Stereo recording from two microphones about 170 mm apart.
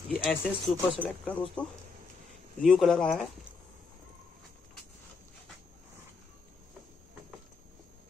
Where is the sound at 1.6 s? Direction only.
25° left (ahead or behind).